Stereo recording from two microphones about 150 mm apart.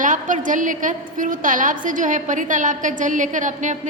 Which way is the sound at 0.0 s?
60° right (ahead or behind).